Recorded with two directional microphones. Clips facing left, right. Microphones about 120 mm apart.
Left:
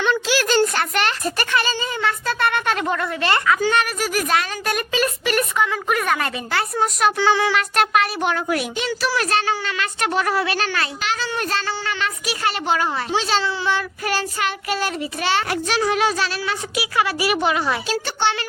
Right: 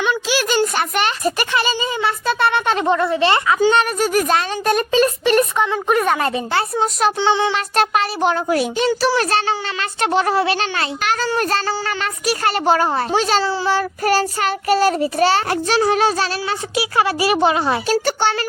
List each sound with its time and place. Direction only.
0.0 s speech: 15° right (ahead or behind)
11.0 s a child's voice: 50° right (ahead or behind)
11.3 s a child's voice: 40° right (ahead or behind)
17.8 s a child's voice: 45° right (ahead or behind)